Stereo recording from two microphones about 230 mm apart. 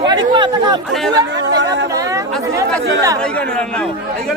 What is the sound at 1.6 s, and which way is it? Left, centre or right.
Chatter, right.